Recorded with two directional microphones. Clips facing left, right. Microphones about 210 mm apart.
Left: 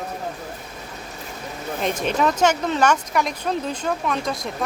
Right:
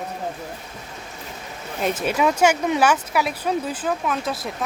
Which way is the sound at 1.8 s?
5° right (ahead or behind).